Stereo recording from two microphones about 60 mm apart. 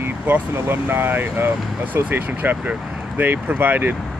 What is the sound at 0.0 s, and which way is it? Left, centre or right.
Speech, right.